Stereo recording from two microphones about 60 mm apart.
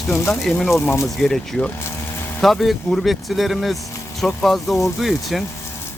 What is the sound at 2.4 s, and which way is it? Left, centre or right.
Speech, centre.